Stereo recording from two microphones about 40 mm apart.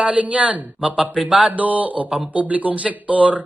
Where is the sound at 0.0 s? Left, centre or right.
Right.